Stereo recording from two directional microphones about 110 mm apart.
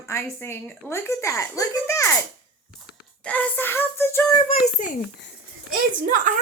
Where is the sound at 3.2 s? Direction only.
15° left (ahead or behind).